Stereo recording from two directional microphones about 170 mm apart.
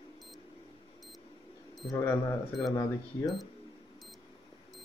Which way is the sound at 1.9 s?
15° left (ahead or behind).